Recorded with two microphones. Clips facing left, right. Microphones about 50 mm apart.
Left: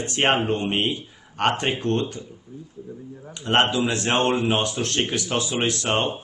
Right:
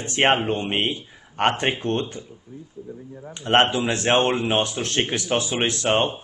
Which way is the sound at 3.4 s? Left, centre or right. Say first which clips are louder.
Right 1 dB; right.